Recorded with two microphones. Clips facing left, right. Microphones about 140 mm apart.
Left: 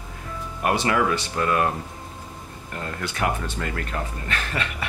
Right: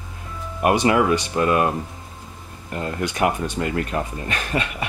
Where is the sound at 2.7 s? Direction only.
20° right (ahead or behind).